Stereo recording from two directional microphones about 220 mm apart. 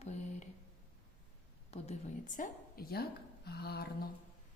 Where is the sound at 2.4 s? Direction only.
40° left (ahead or behind).